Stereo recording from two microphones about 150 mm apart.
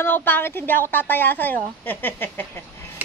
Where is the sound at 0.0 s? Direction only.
10° left (ahead or behind).